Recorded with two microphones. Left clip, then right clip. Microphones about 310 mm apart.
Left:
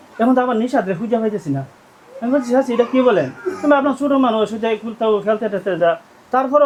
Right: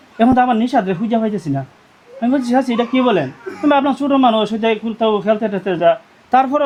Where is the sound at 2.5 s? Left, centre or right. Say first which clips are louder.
Left 3 dB; right.